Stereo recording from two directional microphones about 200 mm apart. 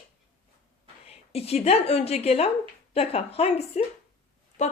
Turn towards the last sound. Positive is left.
turn(degrees=35)  # may be behind; listen again after turning